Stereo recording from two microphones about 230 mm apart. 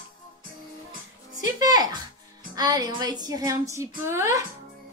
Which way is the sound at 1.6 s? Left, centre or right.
Centre.